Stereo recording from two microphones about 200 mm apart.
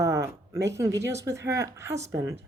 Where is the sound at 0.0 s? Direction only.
15° right (ahead or behind).